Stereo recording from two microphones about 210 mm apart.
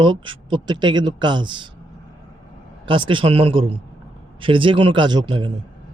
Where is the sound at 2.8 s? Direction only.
25° right (ahead or behind).